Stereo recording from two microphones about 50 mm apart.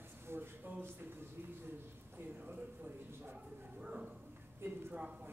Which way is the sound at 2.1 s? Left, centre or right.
Right.